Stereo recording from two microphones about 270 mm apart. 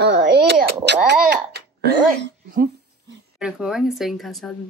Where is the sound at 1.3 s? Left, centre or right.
Right.